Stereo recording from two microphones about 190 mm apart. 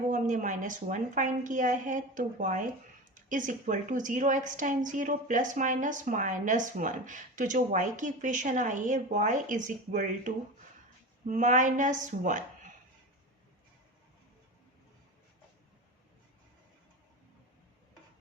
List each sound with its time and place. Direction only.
0.1 s a woman's voice: 45° right (ahead or behind)